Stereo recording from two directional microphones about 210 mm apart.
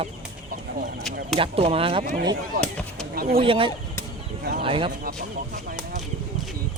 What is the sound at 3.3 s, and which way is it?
Speech, 25° right (ahead or behind).